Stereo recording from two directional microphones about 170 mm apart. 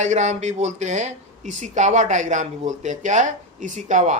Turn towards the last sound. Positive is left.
turn(degrees=-45)  # may be behind; listen again after turning